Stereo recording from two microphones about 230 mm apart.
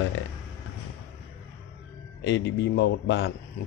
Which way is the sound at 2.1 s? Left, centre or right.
Left.